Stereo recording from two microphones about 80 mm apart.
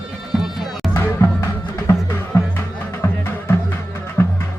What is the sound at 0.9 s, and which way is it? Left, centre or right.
Music, left.